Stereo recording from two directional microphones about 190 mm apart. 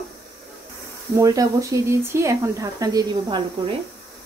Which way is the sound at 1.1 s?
15° right (ahead or behind).